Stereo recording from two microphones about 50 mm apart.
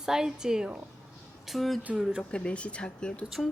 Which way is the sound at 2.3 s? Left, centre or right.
Left.